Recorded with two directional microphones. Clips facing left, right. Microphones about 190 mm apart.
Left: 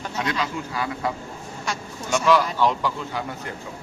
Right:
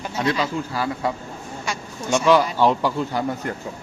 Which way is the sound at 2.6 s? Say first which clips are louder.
Right 4 dB; 35° right (ahead or behind).